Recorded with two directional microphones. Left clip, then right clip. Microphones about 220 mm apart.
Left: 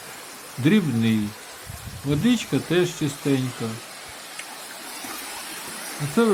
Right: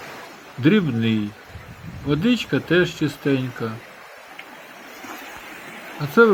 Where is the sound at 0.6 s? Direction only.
5° right (ahead or behind).